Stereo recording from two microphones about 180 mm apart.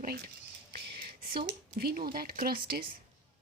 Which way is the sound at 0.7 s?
60° right (ahead or behind).